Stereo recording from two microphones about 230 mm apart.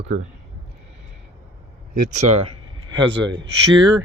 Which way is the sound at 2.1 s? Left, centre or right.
Right.